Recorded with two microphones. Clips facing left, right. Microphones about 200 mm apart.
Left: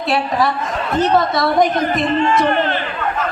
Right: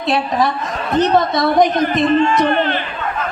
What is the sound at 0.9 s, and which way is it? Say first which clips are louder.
A woman's voice: right 1 dB; 20° right (ahead or behind).